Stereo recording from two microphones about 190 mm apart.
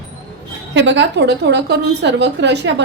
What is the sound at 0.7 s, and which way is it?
A woman's voice, 70° right (ahead or behind).